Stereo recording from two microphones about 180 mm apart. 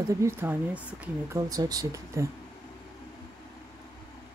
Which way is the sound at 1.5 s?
20° right (ahead or behind).